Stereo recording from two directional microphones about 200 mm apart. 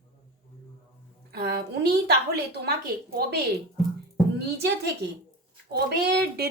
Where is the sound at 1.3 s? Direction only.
50° right (ahead or behind).